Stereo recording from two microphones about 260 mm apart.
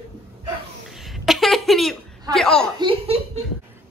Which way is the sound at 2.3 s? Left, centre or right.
Centre.